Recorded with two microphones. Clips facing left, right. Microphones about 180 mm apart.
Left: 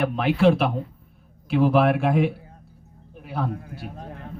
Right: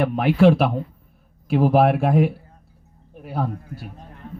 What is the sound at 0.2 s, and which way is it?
A man's voice, 40° right (ahead or behind).